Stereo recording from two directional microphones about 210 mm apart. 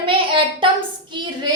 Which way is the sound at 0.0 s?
25° right (ahead or behind).